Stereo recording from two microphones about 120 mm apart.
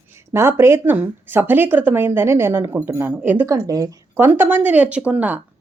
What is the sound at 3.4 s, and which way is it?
Speech, 30° right (ahead or behind).